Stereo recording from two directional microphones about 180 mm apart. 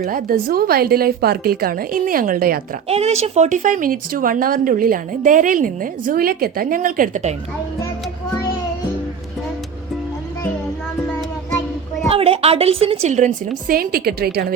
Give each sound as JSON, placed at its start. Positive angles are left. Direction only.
{"t": 0.0, "sound": "a woman's voice", "side_deg": -50}
{"t": 2.9, "sound": "speech", "side_deg": -35}
{"t": 12.0, "sound": "a woman's voice", "side_deg": -30}